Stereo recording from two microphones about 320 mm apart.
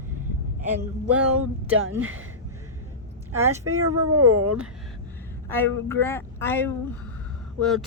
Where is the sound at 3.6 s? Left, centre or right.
Right.